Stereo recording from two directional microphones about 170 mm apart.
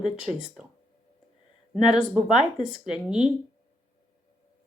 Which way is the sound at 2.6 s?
30° left (ahead or behind).